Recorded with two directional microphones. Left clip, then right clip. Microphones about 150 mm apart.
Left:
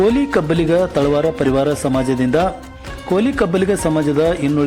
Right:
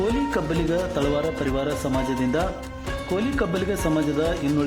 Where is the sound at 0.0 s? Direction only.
35° left (ahead or behind).